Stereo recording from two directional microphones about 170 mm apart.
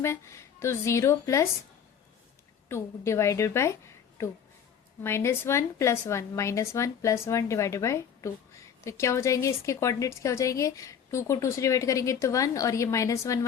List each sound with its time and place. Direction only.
0.0 s a woman's voice: 15° left (ahead or behind)
2.6 s a woman's voice: 15° left (ahead or behind)
5.0 s a woman's voice: 15° left (ahead or behind)